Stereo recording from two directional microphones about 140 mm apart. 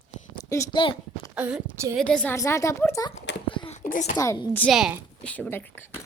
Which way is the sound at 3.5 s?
35° left (ahead or behind).